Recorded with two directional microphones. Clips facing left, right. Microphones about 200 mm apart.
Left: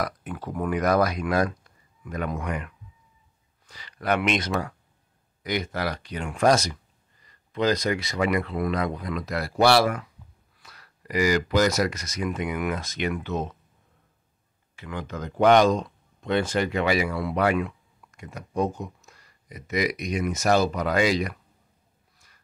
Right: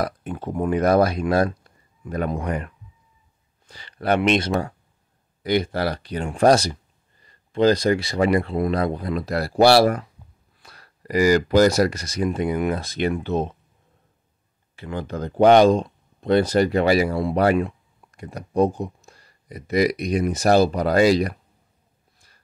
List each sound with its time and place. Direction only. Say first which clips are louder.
0.0 s speech: right 4 dB; 30° right (ahead or behind)
14.8 s speech: right 5 dB; 30° right (ahead or behind)